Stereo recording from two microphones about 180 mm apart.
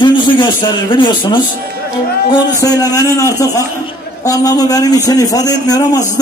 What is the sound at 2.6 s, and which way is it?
Speech, 20° left (ahead or behind).